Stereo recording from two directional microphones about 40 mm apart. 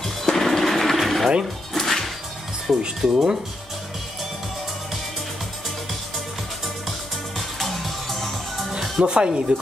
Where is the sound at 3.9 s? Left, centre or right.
Centre.